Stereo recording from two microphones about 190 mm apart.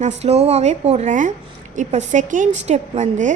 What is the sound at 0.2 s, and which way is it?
A woman's voice, 35° right (ahead or behind).